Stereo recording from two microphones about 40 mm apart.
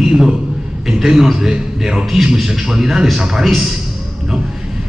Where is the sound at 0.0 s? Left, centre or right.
Centre.